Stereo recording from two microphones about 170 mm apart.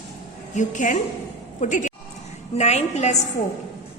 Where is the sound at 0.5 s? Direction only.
50° left (ahead or behind).